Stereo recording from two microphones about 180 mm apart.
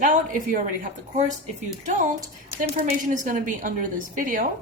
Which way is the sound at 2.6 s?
45° right (ahead or behind).